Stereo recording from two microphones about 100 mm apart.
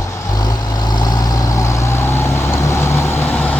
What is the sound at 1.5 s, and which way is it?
Vehicle, 30° left (ahead or behind).